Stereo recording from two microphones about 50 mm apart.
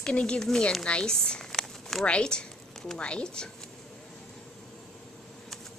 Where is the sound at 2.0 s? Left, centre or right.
Centre.